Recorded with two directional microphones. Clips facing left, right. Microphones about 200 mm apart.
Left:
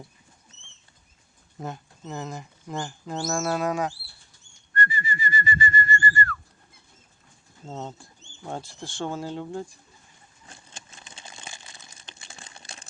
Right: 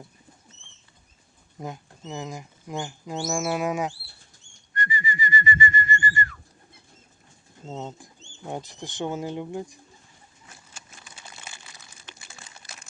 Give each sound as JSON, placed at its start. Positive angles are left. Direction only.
{"t": 1.6, "sound": "speech", "side_deg": -10}
{"t": 4.7, "sound": "whistling", "side_deg": -15}
{"t": 7.7, "sound": "speech", "side_deg": -15}
{"t": 10.5, "sound": "a sound", "side_deg": 30}
{"t": 12.1, "sound": "typing", "side_deg": 25}
{"t": 12.5, "sound": "a sound", "side_deg": 30}